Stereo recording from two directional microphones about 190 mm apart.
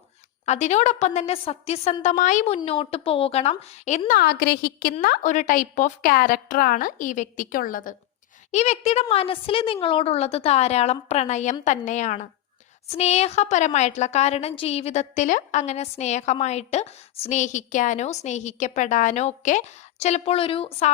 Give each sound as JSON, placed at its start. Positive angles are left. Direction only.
{"t": 0.4, "sound": "a woman's voice", "side_deg": 35}